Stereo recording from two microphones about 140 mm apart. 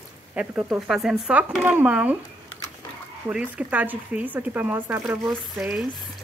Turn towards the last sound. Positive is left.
turn(degrees=-5)  # may be behind; listen again after turning